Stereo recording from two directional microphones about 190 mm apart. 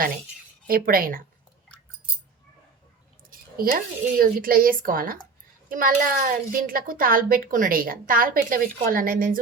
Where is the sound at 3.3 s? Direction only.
50° right (ahead or behind).